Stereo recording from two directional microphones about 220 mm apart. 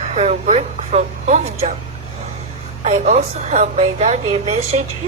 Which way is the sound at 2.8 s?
30° right (ahead or behind).